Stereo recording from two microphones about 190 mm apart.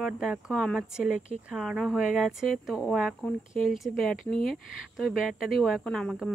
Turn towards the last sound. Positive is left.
turn(degrees=5)  # may be behind; listen again after turning